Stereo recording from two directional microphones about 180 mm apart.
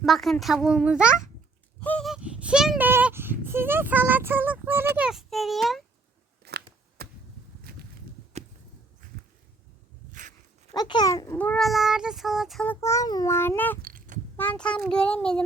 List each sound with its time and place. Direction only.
0.0 s a child's voice: centre (ahead or behind)
1.8 s a sound: 5° left (ahead or behind); by 4.9 s 10° right (ahead or behind)
4.9 s a child's voice: centre (ahead or behind)
6.4 s scissors: 60° right (ahead or behind)
7.0 s chop: 60° right (ahead or behind)
7.7 s walk: 55° right (ahead or behind)
10.1 s walk: 45° right (ahead or behind)
10.8 s a child's voice: 25° left (ahead or behind); by 12.7 s centre (ahead or behind)
12.8 s speech: 15° left (ahead or behind)
13.8 s a sound: 50° right (ahead or behind)
14.3 s a child's voice: 5° left (ahead or behind)